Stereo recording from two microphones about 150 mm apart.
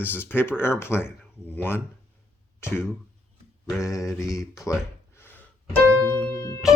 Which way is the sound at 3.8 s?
20° left (ahead or behind).